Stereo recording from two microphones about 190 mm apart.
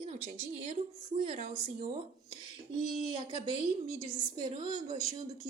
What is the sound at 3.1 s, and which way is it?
A woman's voice, 25° right (ahead or behind).